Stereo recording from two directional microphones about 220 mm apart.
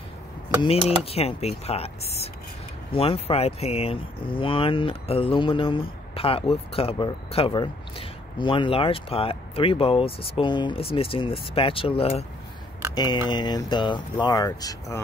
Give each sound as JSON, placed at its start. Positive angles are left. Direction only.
{"t": 0.6, "sound": "speech", "side_deg": 25}